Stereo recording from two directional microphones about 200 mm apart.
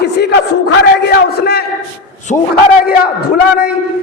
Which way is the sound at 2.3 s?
40° left (ahead or behind).